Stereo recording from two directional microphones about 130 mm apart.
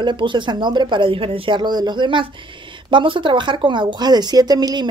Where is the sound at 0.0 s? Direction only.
40° right (ahead or behind).